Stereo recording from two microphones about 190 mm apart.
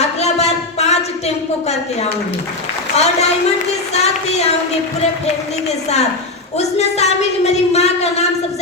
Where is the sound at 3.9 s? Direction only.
35° left (ahead or behind).